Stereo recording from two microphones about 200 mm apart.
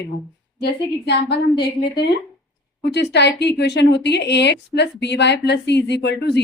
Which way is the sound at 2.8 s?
55° left (ahead or behind).